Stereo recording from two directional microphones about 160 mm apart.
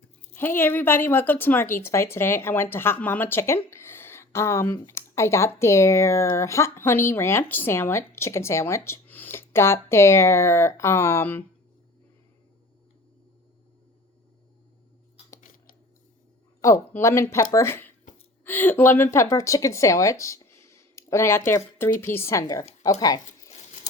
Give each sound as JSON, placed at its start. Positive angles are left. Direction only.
{"t": 0.3, "sound": "a woman's voice", "side_deg": 15}
{"t": 16.9, "sound": "a woman's voice", "side_deg": 15}